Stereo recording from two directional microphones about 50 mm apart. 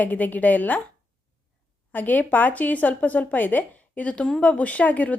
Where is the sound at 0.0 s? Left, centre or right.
Left.